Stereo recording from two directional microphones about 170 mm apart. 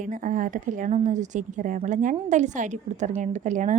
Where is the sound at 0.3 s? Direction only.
50° right (ahead or behind).